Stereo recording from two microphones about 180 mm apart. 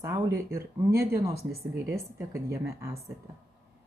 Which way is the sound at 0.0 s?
15° right (ahead or behind).